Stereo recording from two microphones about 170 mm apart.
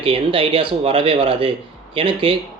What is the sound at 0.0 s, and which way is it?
Speech, 35° right (ahead or behind).